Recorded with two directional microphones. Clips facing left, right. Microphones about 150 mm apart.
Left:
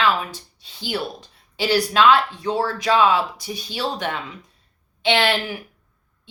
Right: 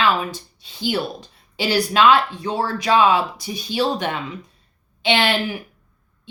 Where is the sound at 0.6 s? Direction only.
15° right (ahead or behind).